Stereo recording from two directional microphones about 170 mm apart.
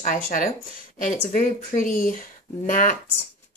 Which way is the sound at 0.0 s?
50° left (ahead or behind).